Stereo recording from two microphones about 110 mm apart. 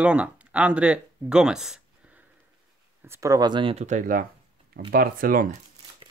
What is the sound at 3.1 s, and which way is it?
Speech, 30° right (ahead or behind).